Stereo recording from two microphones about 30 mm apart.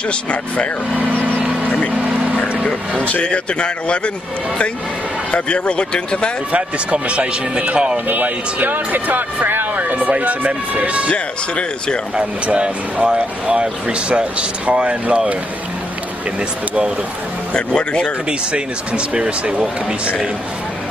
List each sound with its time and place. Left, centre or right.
0.1 s a man's voice: left
3.1 s a man's voice: left
5.3 s a man's voice: left
6.5 s speech: right
7.6 s speech: right
8.1 s speech: right
10.1 s speech: right
13.0 s speech: right
17.6 s a man's voice: left
18.5 s speech: right